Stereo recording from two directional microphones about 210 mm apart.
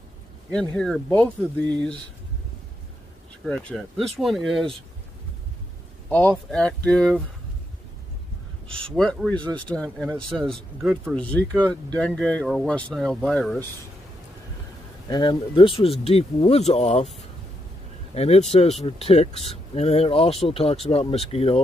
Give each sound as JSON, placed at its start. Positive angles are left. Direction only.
{"t": 0.5, "sound": "speech", "side_deg": 5}
{"t": 3.4, "sound": "speech", "side_deg": 5}
{"t": 6.0, "sound": "speech", "side_deg": 5}
{"t": 8.7, "sound": "speech", "side_deg": 5}
{"t": 15.0, "sound": "speech", "side_deg": 20}
{"t": 18.1, "sound": "speech", "side_deg": 30}